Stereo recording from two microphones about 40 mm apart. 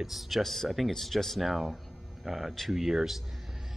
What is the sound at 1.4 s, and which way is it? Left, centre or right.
Speech, centre.